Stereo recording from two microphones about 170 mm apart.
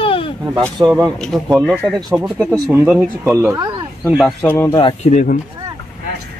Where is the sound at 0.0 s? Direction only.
30° left (ahead or behind).